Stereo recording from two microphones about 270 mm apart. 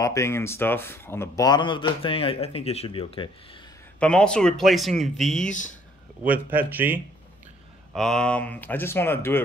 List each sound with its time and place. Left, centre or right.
0.0 s a man's voice: centre
4.0 s a man's voice: centre